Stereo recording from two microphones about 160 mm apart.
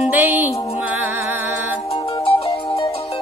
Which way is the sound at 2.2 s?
40° left (ahead or behind).